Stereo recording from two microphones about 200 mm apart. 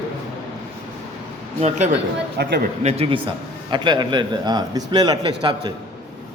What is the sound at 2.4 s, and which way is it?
Speech, 55° right (ahead or behind).